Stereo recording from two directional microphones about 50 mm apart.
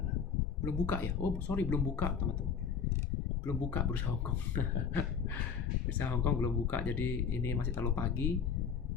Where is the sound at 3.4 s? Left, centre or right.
Left.